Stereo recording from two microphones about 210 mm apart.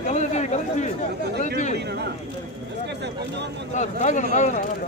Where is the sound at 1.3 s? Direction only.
50° right (ahead or behind).